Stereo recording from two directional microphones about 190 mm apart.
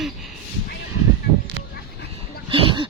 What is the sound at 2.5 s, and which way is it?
Speech, 25° right (ahead or behind).